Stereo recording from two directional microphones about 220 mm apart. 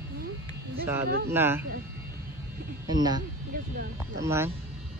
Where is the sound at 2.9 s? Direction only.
20° right (ahead or behind).